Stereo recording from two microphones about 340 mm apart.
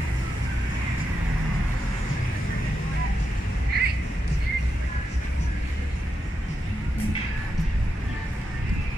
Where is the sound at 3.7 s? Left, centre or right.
Right.